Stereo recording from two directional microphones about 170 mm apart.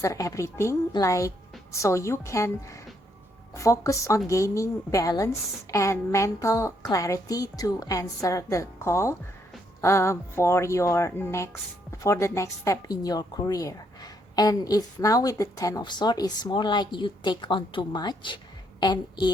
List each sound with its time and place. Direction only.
0.0 s a woman's voice: 20° left (ahead or behind)